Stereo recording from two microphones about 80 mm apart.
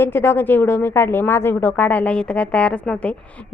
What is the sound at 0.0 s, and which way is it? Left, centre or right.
A woman's voice, left.